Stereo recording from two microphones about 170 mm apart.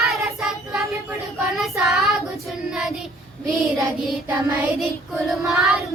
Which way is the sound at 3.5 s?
Centre (ahead or behind).